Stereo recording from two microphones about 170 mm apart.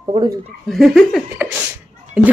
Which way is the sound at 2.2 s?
5° right (ahead or behind).